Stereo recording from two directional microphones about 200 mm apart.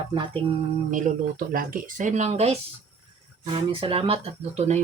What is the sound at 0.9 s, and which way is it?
Speech, 40° right (ahead or behind).